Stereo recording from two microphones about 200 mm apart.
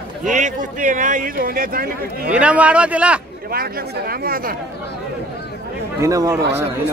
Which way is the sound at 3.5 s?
50° right (ahead or behind).